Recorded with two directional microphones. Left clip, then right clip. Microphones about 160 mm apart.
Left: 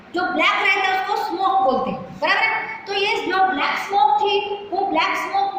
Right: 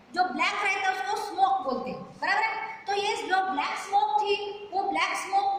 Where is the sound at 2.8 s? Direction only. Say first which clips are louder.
Left 6 dB; 20° right (ahead or behind).